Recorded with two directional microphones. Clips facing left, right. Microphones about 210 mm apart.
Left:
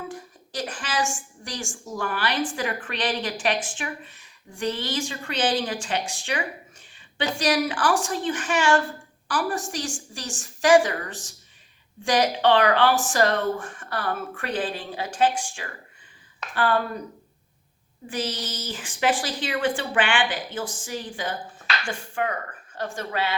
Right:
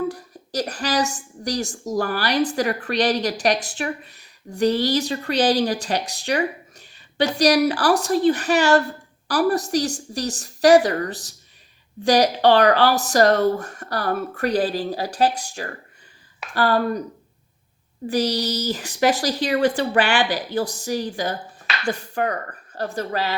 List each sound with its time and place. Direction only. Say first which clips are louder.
0.1 s a woman's voice: right 6 dB; 40° right (ahead or behind)
18.1 s a woman's voice: right 8 dB; 35° right (ahead or behind)